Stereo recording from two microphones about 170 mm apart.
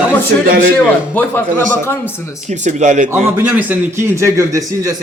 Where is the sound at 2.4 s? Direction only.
45° right (ahead or behind).